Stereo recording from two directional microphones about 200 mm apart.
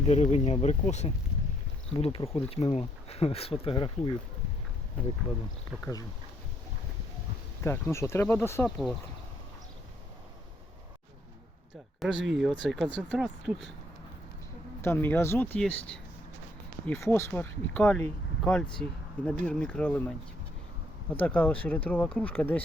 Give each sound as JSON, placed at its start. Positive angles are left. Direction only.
{"t": 0.1, "sound": "speech", "side_deg": 35}
{"t": 5.8, "sound": "speech", "side_deg": 20}
{"t": 7.6, "sound": "speech", "side_deg": 15}
{"t": 12.1, "sound": "speech", "side_deg": -65}
{"t": 12.4, "sound": "speech", "side_deg": 0}
{"t": 14.8, "sound": "speech", "side_deg": 10}
{"t": 16.8, "sound": "speech", "side_deg": 10}